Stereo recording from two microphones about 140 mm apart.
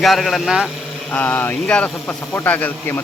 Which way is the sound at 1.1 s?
15° left (ahead or behind).